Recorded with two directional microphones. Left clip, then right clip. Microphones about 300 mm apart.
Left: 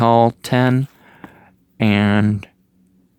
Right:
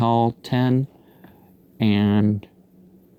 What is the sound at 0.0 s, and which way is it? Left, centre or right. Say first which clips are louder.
Speech: left 7 dB; centre.